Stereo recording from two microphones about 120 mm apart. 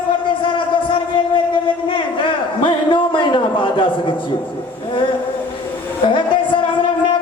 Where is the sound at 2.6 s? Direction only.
45° left (ahead or behind).